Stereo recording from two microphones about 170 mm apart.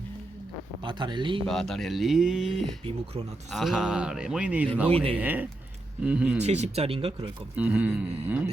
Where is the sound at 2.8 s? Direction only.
35° right (ahead or behind).